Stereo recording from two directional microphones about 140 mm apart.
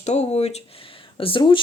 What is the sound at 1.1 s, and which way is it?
Speech, 40° left (ahead or behind).